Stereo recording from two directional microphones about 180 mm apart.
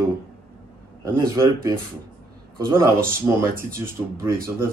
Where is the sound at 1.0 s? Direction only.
15° right (ahead or behind).